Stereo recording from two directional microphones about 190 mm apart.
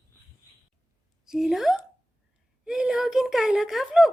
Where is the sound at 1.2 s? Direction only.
Centre (ahead or behind).